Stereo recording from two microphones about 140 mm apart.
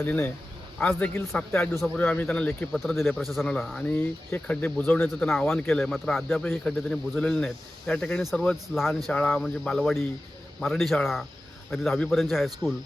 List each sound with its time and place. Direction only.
0.0 s speech: 15° left (ahead or behind)